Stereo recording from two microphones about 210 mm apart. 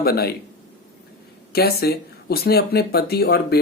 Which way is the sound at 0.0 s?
45° left (ahead or behind).